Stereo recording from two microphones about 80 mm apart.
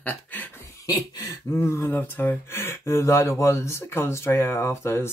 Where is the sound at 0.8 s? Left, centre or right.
Left.